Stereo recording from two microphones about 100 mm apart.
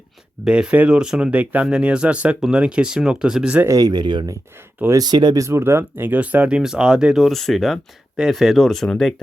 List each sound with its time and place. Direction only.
0.4 s speech: 10° right (ahead or behind)
3.7 s speech: 40° right (ahead or behind)
5.5 s speech: 25° right (ahead or behind); by 9.2 s 5° left (ahead or behind)